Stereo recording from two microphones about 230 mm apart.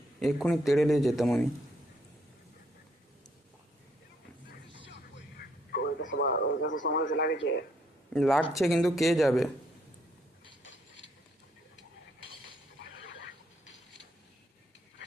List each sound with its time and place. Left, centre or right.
0.2 s a man's voice: centre
4.7 s music: left
5.4 s a sound: left
6.1 s radio: left
6.8 s speech: left
8.1 s a man's voice: centre
10.6 s mechanisms: left
12.5 s a sound: left